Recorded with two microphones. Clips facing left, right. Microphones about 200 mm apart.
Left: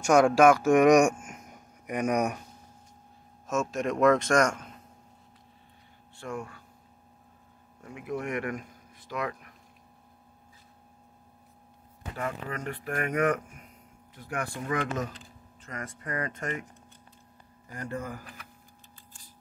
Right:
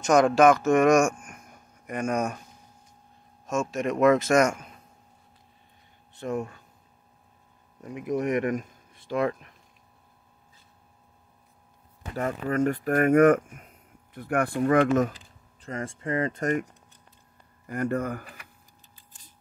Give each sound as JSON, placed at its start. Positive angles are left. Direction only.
{"t": 0.0, "sound": "speech", "side_deg": 10}
{"t": 3.4, "sound": "speech", "side_deg": 0}
{"t": 6.1, "sound": "speech", "side_deg": -20}
{"t": 7.8, "sound": "speech", "side_deg": -20}
{"t": 12.2, "sound": "speech", "side_deg": -45}
{"t": 15.6, "sound": "speech", "side_deg": -30}
{"t": 17.6, "sound": "speech", "side_deg": -60}